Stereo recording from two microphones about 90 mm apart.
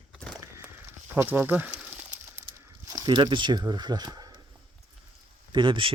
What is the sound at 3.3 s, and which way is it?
Speech, 55° right (ahead or behind).